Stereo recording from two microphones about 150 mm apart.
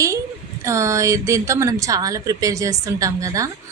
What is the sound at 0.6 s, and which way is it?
A woman's voice, 20° right (ahead or behind).